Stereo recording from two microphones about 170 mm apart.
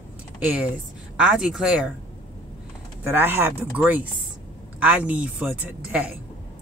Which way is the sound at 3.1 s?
10° right (ahead or behind).